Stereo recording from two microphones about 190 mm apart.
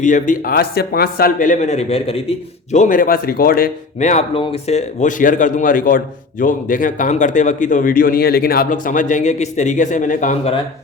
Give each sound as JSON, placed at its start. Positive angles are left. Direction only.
{"t": 0.0, "sound": "speech", "side_deg": 40}
{"t": 2.7, "sound": "speech", "side_deg": 45}